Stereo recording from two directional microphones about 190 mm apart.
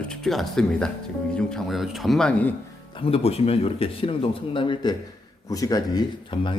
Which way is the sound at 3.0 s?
30° left (ahead or behind).